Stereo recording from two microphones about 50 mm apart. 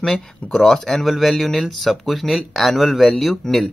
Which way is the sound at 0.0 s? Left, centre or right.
Centre.